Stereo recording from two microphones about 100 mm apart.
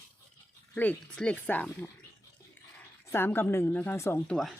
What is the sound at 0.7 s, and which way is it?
Speech, 15° left (ahead or behind).